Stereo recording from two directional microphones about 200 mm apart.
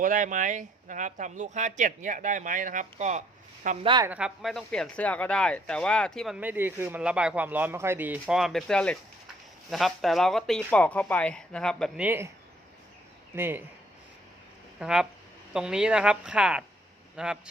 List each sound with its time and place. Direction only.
0.0 s speech: 40° right (ahead or behind)
3.8 s a woman's voice: 20° right (ahead or behind)
4.1 s speech: 5° right (ahead or behind)
12.0 s speech: 10° right (ahead or behind)
13.3 s speech: 10° right (ahead or behind)
14.8 s speech: 5° right (ahead or behind)